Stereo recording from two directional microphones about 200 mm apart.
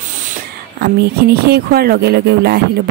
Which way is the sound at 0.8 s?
50° right (ahead or behind).